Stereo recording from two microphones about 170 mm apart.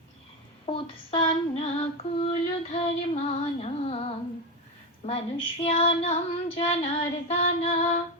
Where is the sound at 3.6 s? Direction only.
35° left (ahead or behind).